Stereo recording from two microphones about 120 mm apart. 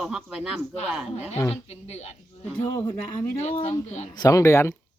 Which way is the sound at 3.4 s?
55° left (ahead or behind).